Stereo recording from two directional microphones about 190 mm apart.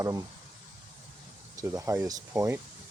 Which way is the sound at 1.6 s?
15° right (ahead or behind).